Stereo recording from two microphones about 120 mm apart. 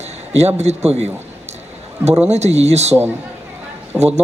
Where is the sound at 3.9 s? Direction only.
10° right (ahead or behind).